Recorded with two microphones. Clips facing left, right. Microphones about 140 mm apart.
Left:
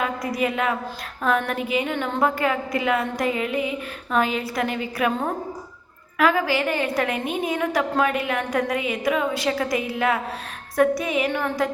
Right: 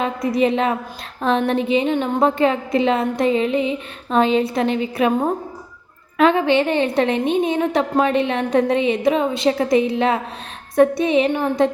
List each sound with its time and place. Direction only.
0.0 s a woman's voice: 25° right (ahead or behind)